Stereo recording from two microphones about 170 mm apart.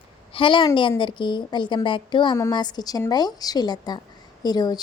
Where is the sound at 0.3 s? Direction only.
30° left (ahead or behind).